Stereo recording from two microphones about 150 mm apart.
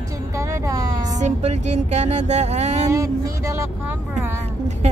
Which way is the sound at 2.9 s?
20° right (ahead or behind).